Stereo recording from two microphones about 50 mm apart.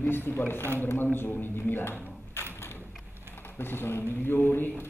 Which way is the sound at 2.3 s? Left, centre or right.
Left.